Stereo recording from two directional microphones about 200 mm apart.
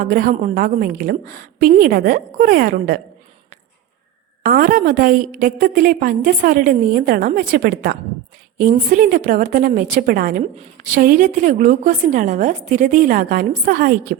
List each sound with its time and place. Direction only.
0.0 s a woman's voice: 40° right (ahead or behind)
4.4 s a woman's voice: 45° right (ahead or behind)